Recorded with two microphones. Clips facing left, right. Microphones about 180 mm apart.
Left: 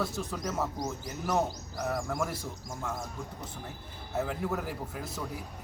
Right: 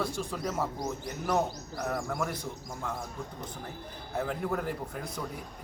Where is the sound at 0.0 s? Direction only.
Centre (ahead or behind).